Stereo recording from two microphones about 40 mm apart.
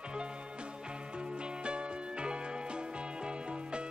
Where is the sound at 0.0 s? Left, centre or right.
Right.